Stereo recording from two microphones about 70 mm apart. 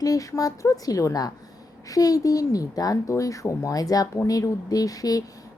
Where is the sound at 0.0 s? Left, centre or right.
Left.